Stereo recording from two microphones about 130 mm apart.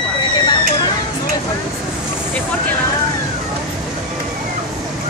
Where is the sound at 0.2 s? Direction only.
35° left (ahead or behind).